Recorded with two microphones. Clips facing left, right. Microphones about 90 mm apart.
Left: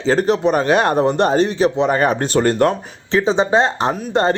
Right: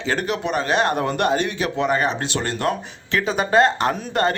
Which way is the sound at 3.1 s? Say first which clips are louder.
Left 6 dB; 25° left (ahead or behind).